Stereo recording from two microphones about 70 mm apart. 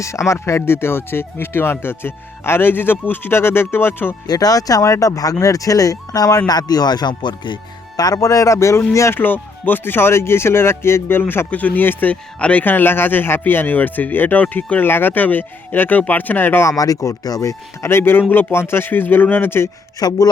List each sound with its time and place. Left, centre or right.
0.0 s speech: left
4.3 s speech: left
6.5 s speech: left
9.1 s a man's voice: left
16.6 s speech: left
17.8 s speech: left
20.0 s speech: left